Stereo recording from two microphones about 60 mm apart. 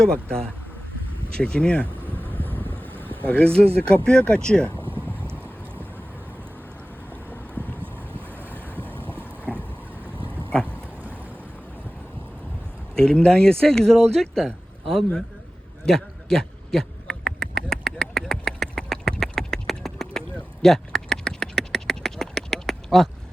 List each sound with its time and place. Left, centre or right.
0.0 s speech: centre
1.4 s speech: centre
2.3 s vehicle: left
3.2 s speech: left
8.4 s boat: right
9.1 s vehicle: right
13.0 s speech: centre
15.9 s a sound: centre